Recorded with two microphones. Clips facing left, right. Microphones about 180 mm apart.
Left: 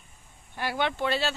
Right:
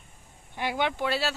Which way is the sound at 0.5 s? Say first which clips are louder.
Even; 15° right (ahead or behind).